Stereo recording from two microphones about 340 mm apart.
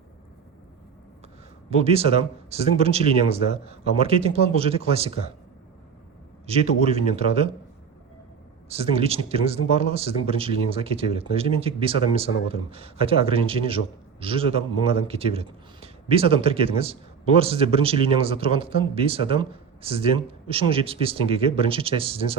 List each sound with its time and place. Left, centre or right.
1.8 s a man's voice: centre
6.5 s a man's voice: centre
8.7 s a man's voice: centre